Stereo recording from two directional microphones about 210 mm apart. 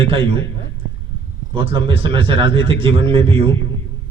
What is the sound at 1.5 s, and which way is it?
A man's voice, 25° right (ahead or behind).